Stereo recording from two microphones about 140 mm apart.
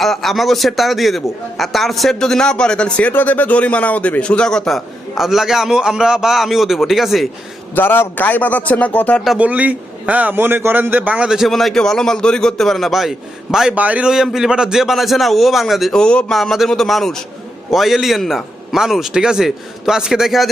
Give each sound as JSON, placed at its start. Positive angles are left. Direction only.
{"t": 0.0, "sound": "a man's voice", "side_deg": 0}
{"t": 7.8, "sound": "speech", "side_deg": 15}
{"t": 9.2, "sound": "a man's voice", "side_deg": -5}